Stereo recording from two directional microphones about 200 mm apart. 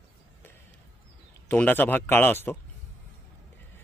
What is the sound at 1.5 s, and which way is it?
Speech, 10° left (ahead or behind).